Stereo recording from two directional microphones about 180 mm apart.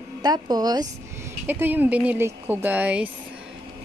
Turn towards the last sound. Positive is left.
turn(degrees=-5)  # may be behind; listen again after turning